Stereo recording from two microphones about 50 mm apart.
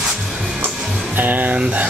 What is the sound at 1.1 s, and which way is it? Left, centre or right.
Speech, right.